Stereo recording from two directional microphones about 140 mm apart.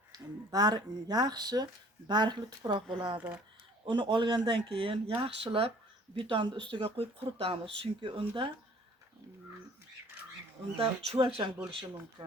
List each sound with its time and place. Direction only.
0.1 s speech: 30° right (ahead or behind)
3.2 s speech: 10° right (ahead or behind)
3.8 s speech: 35° right (ahead or behind)
10.8 s speech: 45° right (ahead or behind)